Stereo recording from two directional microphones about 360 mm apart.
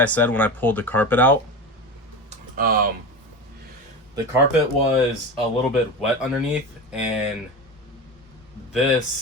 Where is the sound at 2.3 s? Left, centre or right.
Right.